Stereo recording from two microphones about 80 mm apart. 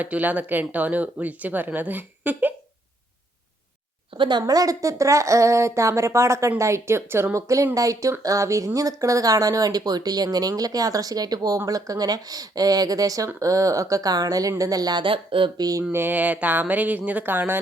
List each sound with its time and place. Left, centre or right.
0.0 s speech: centre
4.2 s speech: right
15.9 s speech: right